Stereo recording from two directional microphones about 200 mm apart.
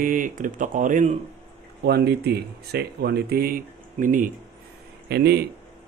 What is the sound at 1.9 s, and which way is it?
Speech, 55° right (ahead or behind).